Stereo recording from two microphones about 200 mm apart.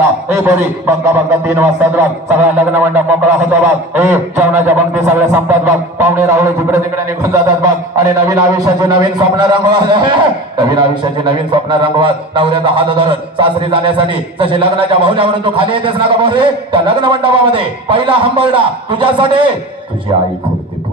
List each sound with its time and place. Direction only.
0.0 s a man's voice: 15° right (ahead or behind)